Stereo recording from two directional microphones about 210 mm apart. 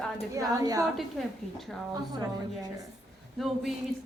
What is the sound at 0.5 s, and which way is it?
Speech, 15° right (ahead or behind).